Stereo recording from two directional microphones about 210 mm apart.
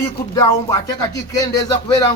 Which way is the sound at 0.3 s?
15° left (ahead or behind).